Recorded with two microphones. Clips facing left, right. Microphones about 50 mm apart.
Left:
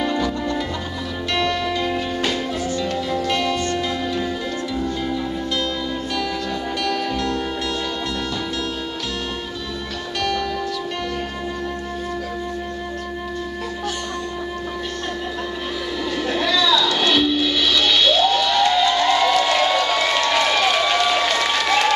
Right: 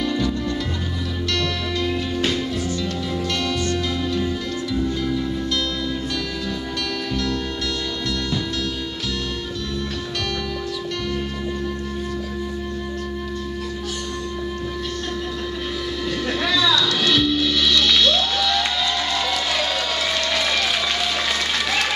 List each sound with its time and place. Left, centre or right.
0.0 s music: left
16.3 s music: centre
18.7 s crowd: centre
21.2 s applause: centre